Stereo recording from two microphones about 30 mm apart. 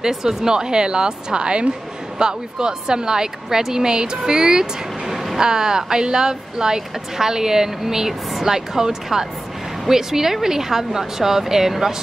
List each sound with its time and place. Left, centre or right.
0.1 s speech: centre
5.0 s vehicle: centre
5.4 s speech: right